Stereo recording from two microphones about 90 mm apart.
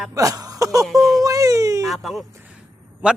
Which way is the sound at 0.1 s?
40° right (ahead or behind).